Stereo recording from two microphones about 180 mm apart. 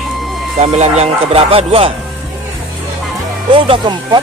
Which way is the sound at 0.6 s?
35° right (ahead or behind).